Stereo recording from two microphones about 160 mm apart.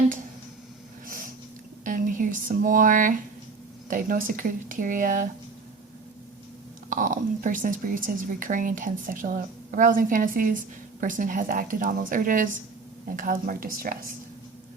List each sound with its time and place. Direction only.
1.0 s a sound: 60° right (ahead or behind)
1.8 s a woman's voice: 55° right (ahead or behind)
6.9 s a woman's voice: 55° right (ahead or behind)